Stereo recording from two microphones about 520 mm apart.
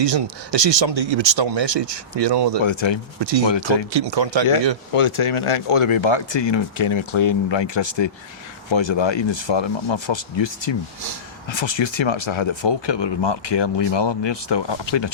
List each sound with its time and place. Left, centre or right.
0.0 s speech: right
2.6 s speech: left
3.2 s speech: right
3.4 s speech: left
3.9 s speech: right
4.9 s speech: left